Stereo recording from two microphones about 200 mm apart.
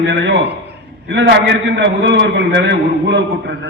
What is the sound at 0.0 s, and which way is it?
A man's voice, 60° right (ahead or behind).